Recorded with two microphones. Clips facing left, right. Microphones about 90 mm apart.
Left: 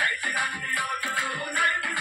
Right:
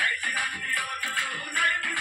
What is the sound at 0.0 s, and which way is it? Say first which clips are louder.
Music: left 2 dB; 15° left (ahead or behind).